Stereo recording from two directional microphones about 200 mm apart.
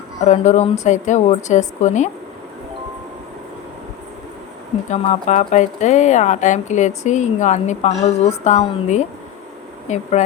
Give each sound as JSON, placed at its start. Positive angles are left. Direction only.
{"t": 0.2, "sound": "speech", "side_deg": 35}
{"t": 4.9, "sound": "speech", "side_deg": 35}